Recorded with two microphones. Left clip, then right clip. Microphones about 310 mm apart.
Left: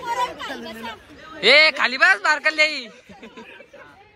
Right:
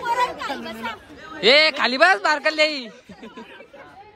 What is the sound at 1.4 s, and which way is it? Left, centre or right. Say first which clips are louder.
A man's voice: left 1 dB; centre.